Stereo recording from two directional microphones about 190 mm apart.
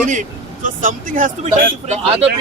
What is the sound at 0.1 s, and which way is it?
Speech, 45° right (ahead or behind).